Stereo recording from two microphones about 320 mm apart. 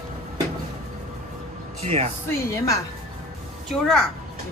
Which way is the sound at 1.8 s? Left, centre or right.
Centre.